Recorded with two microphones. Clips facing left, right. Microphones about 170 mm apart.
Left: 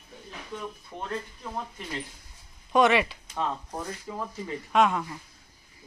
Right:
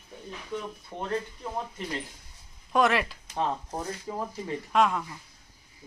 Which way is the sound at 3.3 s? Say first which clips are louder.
Right 2 dB; 25° right (ahead or behind).